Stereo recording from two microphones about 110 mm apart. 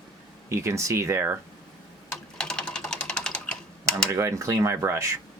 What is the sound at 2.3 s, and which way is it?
Typing, 5° left (ahead or behind).